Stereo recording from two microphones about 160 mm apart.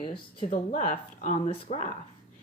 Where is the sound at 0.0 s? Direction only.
30° left (ahead or behind).